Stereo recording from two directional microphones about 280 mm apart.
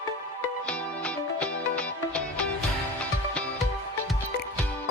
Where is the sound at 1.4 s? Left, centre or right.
Centre.